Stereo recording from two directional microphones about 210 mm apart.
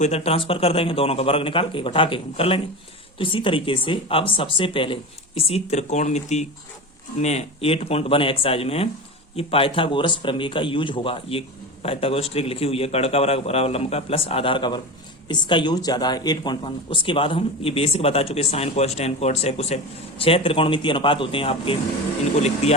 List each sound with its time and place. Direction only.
0.0 s speech: 30° left (ahead or behind)